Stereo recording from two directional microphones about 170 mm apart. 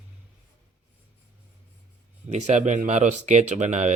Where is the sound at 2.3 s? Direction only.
45° right (ahead or behind).